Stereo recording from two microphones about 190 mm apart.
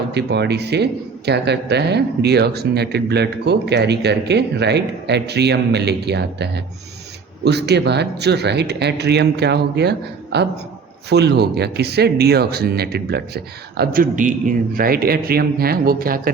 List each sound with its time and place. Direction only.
0.1 s a man's voice: 60° right (ahead or behind)